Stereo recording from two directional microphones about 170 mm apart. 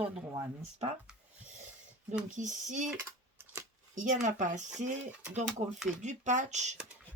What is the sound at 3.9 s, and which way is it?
Speech, 45° right (ahead or behind).